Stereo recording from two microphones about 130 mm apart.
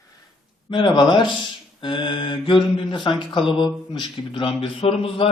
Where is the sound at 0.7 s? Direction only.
40° left (ahead or behind).